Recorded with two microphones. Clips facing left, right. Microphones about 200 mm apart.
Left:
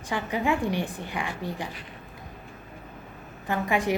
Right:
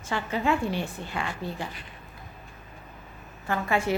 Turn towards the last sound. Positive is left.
turn(degrees=15)  # may be behind; listen again after turning